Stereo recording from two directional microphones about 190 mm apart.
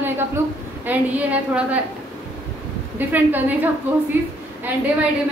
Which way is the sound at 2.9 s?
10° right (ahead or behind).